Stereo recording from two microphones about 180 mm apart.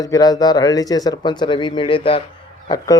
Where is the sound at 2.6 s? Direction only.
20° left (ahead or behind).